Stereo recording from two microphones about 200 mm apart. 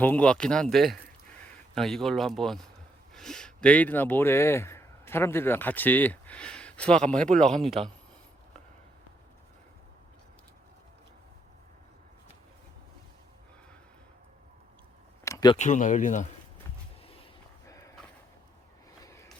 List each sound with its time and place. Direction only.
0.0 s speech: 5° left (ahead or behind)
7.8 s speech: 30° right (ahead or behind)
15.2 s a sound: 15° left (ahead or behind)
15.5 s speech: 35° left (ahead or behind)
17.7 s horse: 15° left (ahead or behind)
19.0 s a sound: 15° left (ahead or behind)